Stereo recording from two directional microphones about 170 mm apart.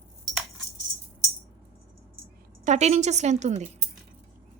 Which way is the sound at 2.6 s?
40° right (ahead or behind).